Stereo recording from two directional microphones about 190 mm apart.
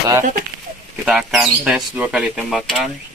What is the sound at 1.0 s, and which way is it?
Speech, 5° right (ahead or behind).